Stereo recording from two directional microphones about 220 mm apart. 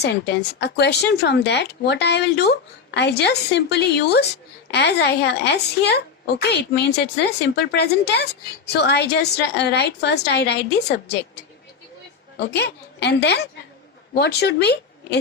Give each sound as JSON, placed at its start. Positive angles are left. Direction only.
{"t": 0.0, "sound": "speech", "side_deg": 50}
{"t": 12.4, "sound": "speech", "side_deg": 50}